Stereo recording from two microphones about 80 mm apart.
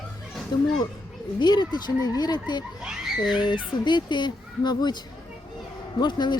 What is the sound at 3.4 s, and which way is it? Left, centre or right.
Speech, left.